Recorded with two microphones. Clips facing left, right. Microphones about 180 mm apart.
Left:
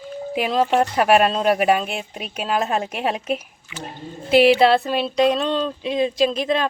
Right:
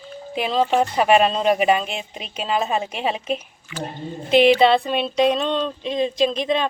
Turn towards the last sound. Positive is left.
turn(degrees=0)  # may be behind; listen again after turning